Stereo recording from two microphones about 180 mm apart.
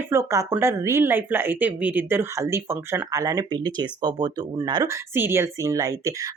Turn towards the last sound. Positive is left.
turn(degrees=-20)  # may be behind; listen again after turning